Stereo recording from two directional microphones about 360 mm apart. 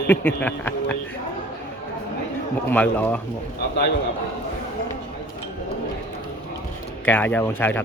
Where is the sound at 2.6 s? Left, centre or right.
Centre.